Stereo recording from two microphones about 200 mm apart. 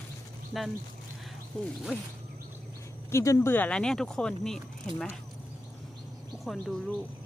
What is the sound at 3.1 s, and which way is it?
Speech, 15° left (ahead or behind).